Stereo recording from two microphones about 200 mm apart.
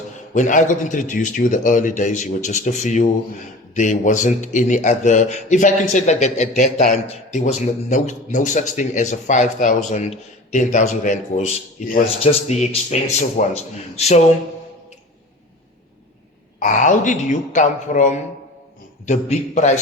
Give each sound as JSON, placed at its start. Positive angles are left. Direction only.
{"t": 0.3, "sound": "a man's voice", "side_deg": 40}
{"t": 16.6, "sound": "a man's voice", "side_deg": 40}